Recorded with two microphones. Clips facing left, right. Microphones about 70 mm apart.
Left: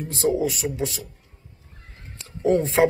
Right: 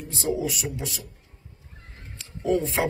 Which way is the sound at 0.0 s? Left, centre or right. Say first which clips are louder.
Left 5 dB; left.